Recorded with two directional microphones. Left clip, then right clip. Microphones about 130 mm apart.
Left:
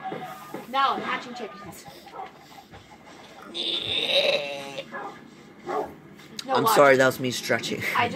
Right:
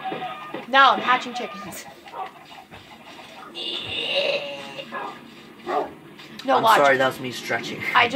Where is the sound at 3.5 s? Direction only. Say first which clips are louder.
Left 2 dB; 90° left.